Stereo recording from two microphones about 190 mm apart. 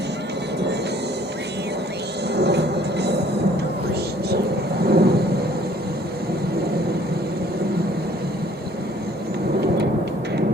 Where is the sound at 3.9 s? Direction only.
55° right (ahead or behind).